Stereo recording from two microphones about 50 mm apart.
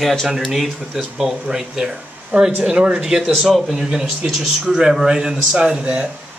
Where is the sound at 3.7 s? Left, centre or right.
Centre.